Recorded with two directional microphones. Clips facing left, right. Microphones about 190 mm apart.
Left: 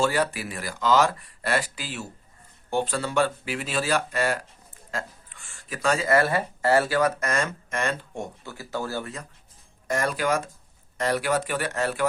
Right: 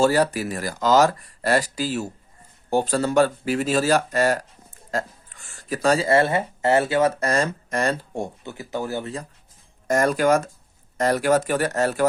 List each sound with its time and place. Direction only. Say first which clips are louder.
0.0 s speech: right 5 dB; 40° right (ahead or behind)
8.4 s speech: right 3 dB; 20° right (ahead or behind)
9.8 s speech: right 6 dB; 45° right (ahead or behind)